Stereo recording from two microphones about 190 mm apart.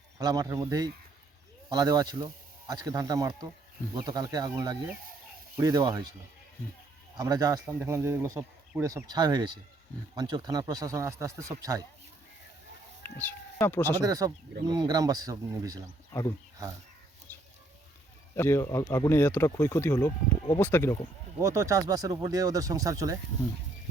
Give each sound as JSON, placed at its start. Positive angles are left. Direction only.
{"t": 0.2, "sound": "speech", "side_deg": -20}
{"t": 7.2, "sound": "speech", "side_deg": -20}
{"t": 13.0, "sound": "speech", "side_deg": 10}
{"t": 14.0, "sound": "speech", "side_deg": -20}
{"t": 17.3, "sound": "a sound", "side_deg": 10}
{"t": 18.3, "sound": "speech", "side_deg": 15}
{"t": 21.4, "sound": "speech", "side_deg": -15}